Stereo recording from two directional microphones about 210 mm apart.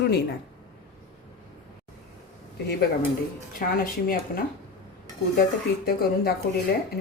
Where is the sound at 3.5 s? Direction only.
40° left (ahead or behind).